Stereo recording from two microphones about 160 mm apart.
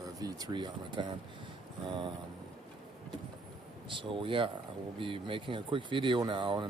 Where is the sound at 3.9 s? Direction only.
30° right (ahead or behind).